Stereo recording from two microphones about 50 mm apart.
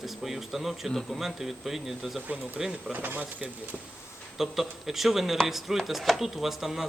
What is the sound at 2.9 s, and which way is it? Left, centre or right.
Speech, right.